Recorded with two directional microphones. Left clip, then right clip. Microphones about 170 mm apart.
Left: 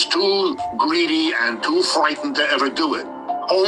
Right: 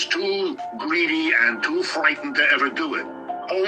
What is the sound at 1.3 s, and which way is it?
Speech, 45° right (ahead or behind).